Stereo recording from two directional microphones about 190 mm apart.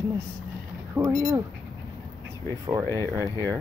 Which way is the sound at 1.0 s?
10° right (ahead or behind).